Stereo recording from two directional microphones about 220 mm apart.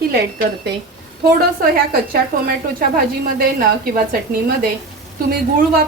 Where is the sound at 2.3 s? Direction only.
40° right (ahead or behind).